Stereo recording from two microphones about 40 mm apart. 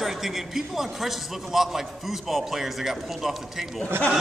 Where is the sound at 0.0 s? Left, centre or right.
Centre.